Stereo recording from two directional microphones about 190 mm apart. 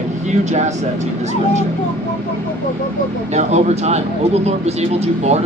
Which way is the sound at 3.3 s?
35° right (ahead or behind).